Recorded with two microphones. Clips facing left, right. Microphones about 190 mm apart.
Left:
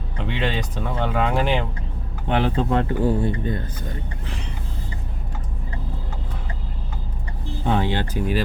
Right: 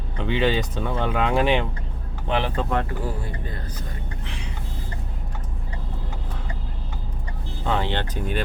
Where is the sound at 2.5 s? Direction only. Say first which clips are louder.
Left 4 dB; 30° left (ahead or behind).